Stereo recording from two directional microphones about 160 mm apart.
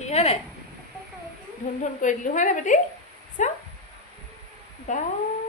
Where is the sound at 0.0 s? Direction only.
40° left (ahead or behind).